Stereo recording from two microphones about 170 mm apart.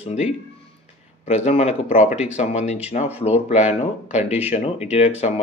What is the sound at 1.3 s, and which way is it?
A man's voice, 40° left (ahead or behind).